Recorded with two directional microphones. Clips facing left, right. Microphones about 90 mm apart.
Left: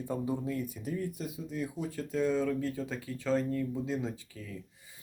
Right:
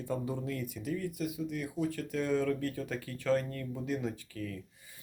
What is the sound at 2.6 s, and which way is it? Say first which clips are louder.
Speech: left 1 dB; 20° left (ahead or behind).